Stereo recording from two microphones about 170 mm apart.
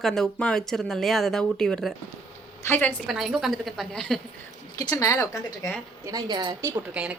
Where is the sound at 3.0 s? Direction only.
Centre (ahead or behind).